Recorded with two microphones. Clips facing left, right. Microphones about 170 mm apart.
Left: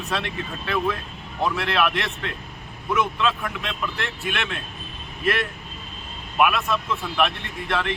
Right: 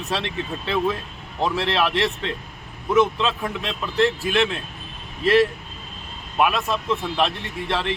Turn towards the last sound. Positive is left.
turn(degrees=-30)  # may be behind; listen again after turning